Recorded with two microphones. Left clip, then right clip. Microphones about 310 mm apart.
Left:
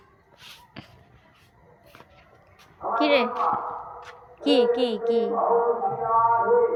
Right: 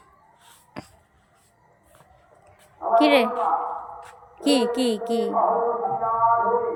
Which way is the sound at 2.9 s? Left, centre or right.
Centre.